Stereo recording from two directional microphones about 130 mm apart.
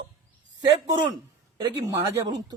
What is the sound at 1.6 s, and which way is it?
Speech, 25° right (ahead or behind).